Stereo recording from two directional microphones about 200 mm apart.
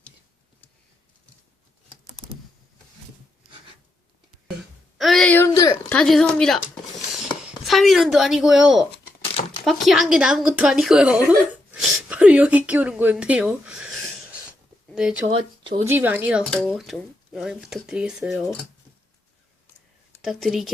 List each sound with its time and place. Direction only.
4.9 s a sound: centre (ahead or behind); by 5.8 s 20° left (ahead or behind)
5.9 s speech: 5° left (ahead or behind)
7.7 s a woman's voice: centre (ahead or behind)
15.3 s speech: 25° right (ahead or behind)
15.8 s speech: 10° right (ahead or behind)
16.4 s speech: 5° left (ahead or behind)
20.2 s speech: centre (ahead or behind)